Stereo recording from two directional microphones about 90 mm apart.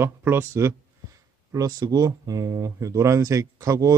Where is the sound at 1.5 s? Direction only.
40° right (ahead or behind).